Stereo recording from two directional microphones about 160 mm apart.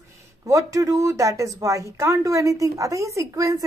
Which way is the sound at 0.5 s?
20° right (ahead or behind).